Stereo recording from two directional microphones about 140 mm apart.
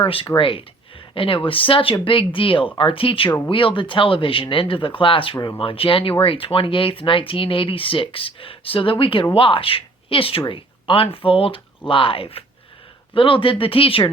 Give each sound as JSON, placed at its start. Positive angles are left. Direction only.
{"t": 0.0, "sound": "speech", "side_deg": 40}